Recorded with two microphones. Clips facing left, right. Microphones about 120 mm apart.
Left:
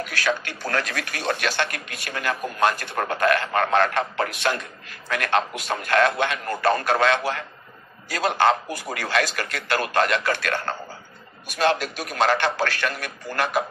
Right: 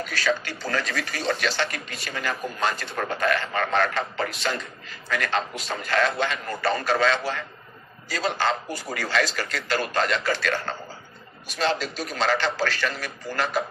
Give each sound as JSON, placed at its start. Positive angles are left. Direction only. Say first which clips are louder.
{"t": 0.0, "sound": "speech", "louder": "even", "side_deg": 60}